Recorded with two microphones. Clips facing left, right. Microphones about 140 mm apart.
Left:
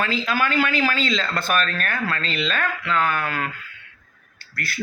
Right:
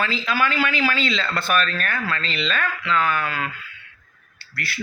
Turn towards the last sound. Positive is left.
turn(degrees=45)  # may be behind; listen again after turning